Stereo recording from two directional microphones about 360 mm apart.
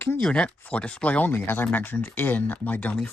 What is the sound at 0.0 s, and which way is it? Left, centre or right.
Speech, centre.